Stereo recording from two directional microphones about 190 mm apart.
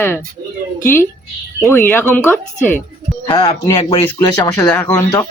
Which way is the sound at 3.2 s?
25° left (ahead or behind).